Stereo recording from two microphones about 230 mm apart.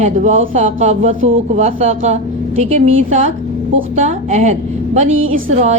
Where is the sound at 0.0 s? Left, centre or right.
Right.